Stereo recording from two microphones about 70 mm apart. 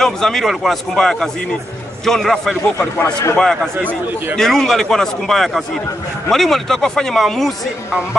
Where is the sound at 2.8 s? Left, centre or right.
Left.